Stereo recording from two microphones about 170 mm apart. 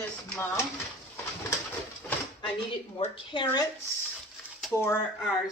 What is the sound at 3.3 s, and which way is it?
Speech, 25° left (ahead or behind).